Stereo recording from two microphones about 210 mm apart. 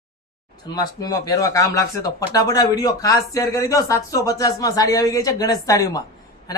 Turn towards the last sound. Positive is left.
turn(degrees=15)  # may be behind; listen again after turning